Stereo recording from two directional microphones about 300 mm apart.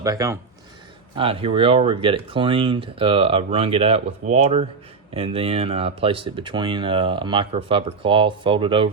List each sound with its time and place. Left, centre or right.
0.0 s speech: centre